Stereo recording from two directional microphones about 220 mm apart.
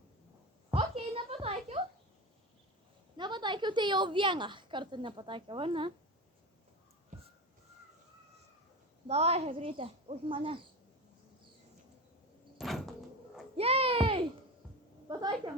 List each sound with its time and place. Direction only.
0.7 s a sound: 25° right (ahead or behind)
3.2 s a woman's voice: 20° right (ahead or behind)
7.1 s whistling: 35° right (ahead or behind)
9.0 s a woman's voice: 30° right (ahead or behind)
12.5 s door: centre (ahead or behind)
13.6 s a sound: 25° right (ahead or behind)